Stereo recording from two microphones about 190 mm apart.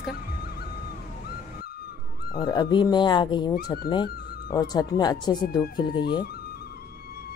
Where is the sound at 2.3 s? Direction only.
20° left (ahead or behind).